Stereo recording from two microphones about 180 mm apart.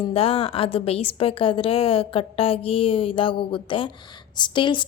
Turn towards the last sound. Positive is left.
turn(degrees=25)  # may be behind; listen again after turning